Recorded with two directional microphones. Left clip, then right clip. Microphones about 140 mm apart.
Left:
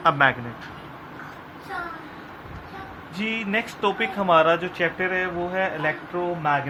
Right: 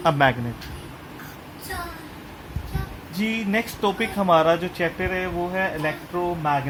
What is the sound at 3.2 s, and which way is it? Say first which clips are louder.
Speech: right 1 dB; 50° right (ahead or behind).